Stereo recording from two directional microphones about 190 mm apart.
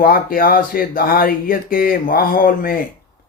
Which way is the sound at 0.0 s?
50° left (ahead or behind).